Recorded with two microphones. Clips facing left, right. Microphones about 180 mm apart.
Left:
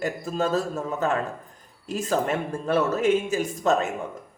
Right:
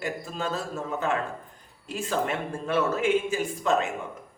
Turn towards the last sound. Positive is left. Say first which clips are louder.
# left 2 dB
turn(degrees=40)  # may be behind; listen again after turning